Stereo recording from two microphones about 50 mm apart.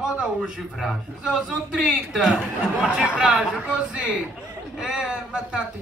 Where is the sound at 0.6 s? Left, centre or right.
Centre.